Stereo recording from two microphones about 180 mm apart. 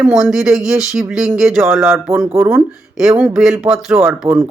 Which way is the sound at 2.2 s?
10° right (ahead or behind).